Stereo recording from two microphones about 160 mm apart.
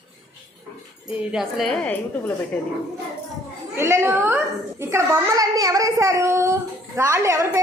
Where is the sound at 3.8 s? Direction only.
15° right (ahead or behind).